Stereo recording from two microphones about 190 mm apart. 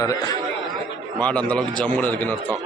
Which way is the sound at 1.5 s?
10° left (ahead or behind).